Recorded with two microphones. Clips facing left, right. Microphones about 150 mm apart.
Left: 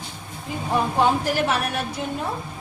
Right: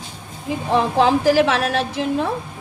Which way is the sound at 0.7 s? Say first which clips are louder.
Right 4 dB; 90° right.